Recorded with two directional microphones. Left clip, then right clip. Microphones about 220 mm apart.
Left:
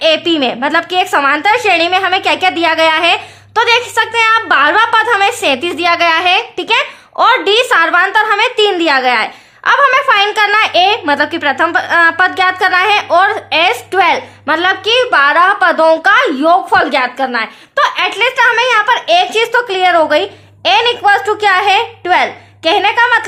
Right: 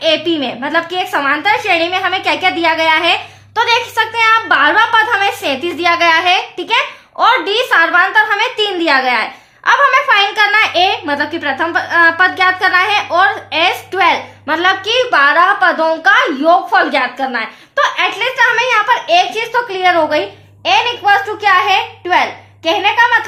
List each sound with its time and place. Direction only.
0.0 s a woman's voice: 35° left (ahead or behind)